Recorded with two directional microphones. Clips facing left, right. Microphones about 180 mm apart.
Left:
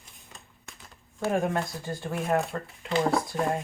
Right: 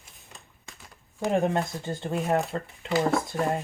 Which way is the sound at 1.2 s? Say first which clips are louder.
Right 2 dB; 20° right (ahead or behind).